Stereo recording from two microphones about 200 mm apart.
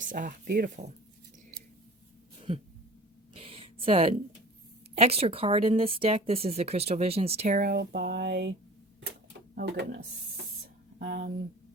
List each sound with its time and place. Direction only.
0.0 s speech: 40° right (ahead or behind)
2.5 s a sound: 30° right (ahead or behind)
4.9 s a woman's voice: 30° right (ahead or behind); by 8.5 s 55° right (ahead or behind)
9.6 s speech: 55° right (ahead or behind)
11.0 s speech: 55° right (ahead or behind)